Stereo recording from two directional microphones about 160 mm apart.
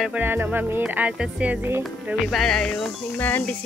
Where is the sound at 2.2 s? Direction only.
5° left (ahead or behind).